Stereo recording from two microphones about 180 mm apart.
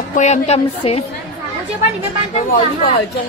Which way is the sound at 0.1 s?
40° left (ahead or behind).